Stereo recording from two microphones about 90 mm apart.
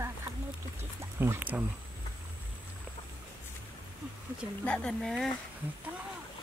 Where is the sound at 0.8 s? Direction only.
25° right (ahead or behind).